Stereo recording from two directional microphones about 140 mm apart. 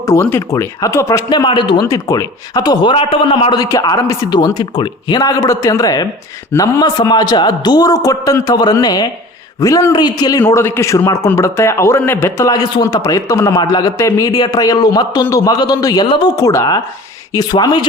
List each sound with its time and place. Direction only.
0.0 s a man's voice: 20° left (ahead or behind)
10.4 s a man's voice: 15° left (ahead or behind); by 16.3 s 35° left (ahead or behind)
16.3 s a man's voice: 20° left (ahead or behind)